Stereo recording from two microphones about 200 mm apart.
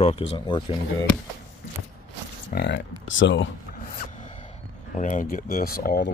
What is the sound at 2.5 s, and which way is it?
Speech, 55° left (ahead or behind).